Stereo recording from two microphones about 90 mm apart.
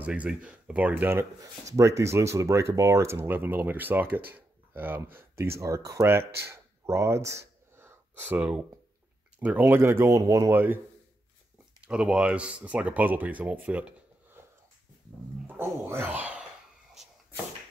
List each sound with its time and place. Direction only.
0.0 s speech: 15° right (ahead or behind)
1.4 s speech: 35° right (ahead or behind)
10.5 s speech: 25° right (ahead or behind)
11.8 s speech: 10° right (ahead or behind)
15.4 s speech: 25° right (ahead or behind)